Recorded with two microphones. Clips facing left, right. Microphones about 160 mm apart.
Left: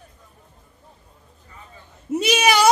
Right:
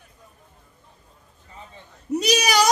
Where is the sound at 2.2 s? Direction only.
40° right (ahead or behind).